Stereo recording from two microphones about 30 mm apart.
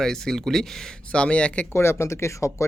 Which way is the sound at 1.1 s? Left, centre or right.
Left.